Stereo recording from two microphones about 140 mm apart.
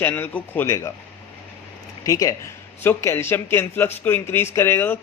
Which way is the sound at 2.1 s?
25° left (ahead or behind).